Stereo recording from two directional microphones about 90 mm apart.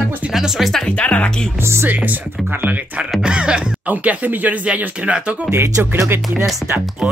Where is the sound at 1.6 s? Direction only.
30° right (ahead or behind); by 5.5 s 10° right (ahead or behind).